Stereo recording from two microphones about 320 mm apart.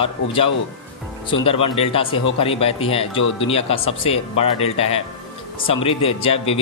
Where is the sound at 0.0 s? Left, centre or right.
Centre.